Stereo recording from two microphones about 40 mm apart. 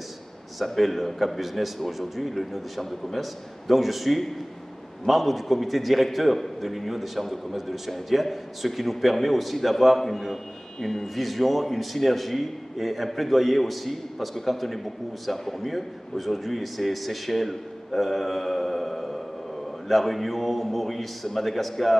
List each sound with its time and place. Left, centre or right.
0.7 s a man's voice: centre